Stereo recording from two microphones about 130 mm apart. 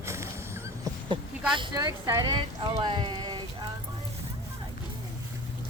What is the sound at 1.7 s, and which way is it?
Speech, 30° right (ahead or behind).